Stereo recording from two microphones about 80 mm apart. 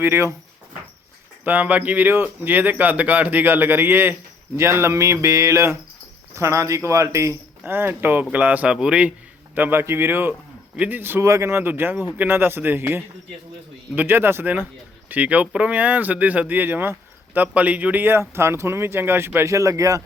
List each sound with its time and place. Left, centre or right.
0.0 s speech: right
1.5 s a man's voice: right
9.6 s speech: right
11.2 s speech: right